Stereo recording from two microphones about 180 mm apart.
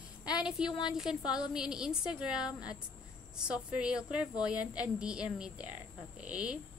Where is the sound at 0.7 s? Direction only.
25° left (ahead or behind).